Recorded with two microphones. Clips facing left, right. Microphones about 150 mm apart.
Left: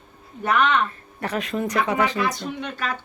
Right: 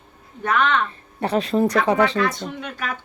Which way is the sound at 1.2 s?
30° right (ahead or behind).